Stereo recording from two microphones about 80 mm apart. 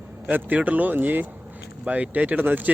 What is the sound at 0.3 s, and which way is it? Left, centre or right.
Speech, right.